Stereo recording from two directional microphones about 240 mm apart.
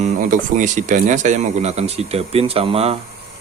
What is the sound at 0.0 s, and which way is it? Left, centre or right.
Speech, right.